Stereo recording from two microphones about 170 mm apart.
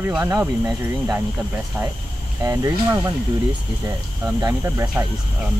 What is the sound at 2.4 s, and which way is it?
Speech, 15° right (ahead or behind).